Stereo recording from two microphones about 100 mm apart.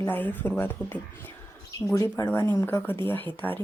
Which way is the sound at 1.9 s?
30° left (ahead or behind).